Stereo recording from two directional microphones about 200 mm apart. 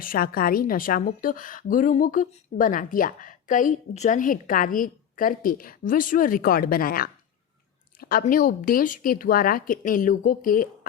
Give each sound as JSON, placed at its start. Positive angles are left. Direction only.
{"t": 0.0, "sound": "a woman's voice", "side_deg": 45}